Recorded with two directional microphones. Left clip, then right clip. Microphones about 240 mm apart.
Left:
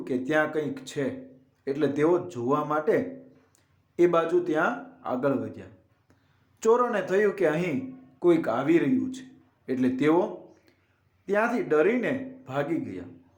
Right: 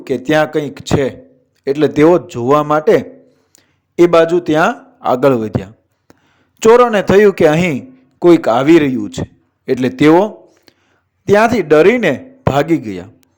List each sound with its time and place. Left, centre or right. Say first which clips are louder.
0.0 s speech: right 12 dB; right
3.5 s a sound: right 15 dB; right
6.6 s a man's voice: right 15 dB; right